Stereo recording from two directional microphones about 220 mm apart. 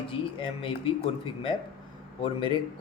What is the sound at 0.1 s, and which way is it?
Speech, 25° left (ahead or behind).